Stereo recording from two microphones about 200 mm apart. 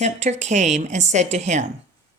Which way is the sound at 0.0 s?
35° right (ahead or behind).